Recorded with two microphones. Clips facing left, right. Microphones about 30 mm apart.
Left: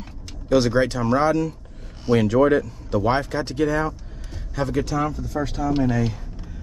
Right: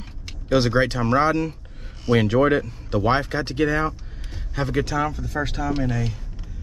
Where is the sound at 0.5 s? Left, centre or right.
Right.